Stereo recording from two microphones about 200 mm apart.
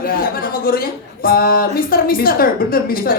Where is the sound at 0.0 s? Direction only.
45° left (ahead or behind).